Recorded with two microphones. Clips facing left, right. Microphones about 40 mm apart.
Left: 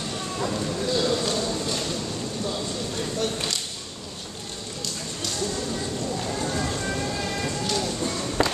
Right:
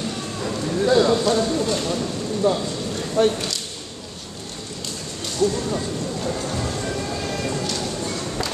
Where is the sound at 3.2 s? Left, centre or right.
Right.